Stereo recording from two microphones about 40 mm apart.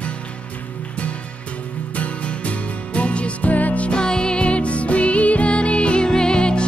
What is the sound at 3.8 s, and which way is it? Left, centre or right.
Music, left.